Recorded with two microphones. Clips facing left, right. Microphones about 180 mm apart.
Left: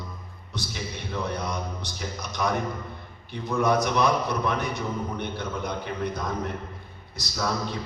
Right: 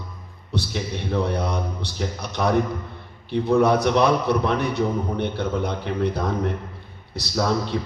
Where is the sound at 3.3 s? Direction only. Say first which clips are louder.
Right 6 dB; 60° right (ahead or behind).